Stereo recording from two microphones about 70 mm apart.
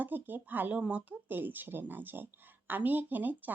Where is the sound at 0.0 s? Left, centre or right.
Right.